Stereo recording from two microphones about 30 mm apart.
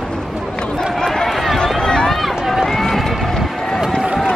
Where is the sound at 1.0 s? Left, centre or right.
Centre.